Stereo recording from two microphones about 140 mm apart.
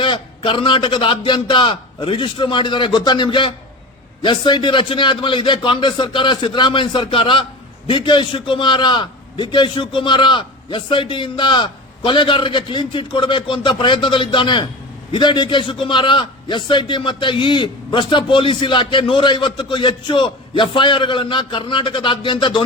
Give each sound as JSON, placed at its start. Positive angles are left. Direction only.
{"t": 0.0, "sound": "a man's voice", "side_deg": 35}